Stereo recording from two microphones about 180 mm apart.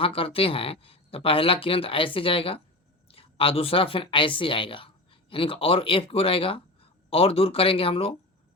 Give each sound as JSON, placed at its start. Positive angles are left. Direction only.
{"t": 0.0, "sound": "speech", "side_deg": 30}